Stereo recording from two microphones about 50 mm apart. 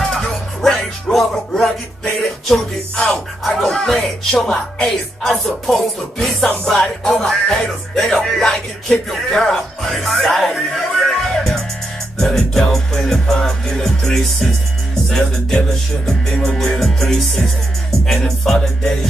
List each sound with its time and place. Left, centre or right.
0.0 s music: centre
4.5 s speech: centre
4.8 s music: centre
9.1 s speech: centre
10.7 s music: centre
16.1 s speech: centre
18.0 s music: centre